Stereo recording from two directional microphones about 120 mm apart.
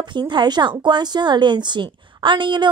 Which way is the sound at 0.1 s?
40° right (ahead or behind).